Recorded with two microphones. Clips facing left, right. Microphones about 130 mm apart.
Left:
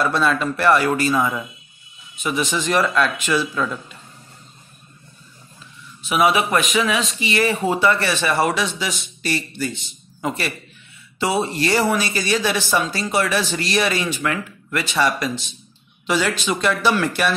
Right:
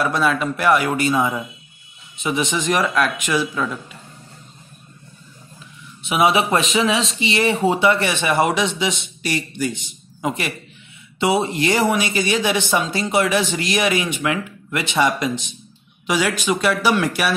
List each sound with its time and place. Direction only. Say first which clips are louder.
0.0 s speech: even; 10° right (ahead or behind)
6.0 s speech: right 1 dB; 25° right (ahead or behind)